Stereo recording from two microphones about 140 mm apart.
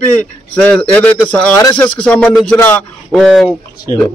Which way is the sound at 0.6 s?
10° left (ahead or behind).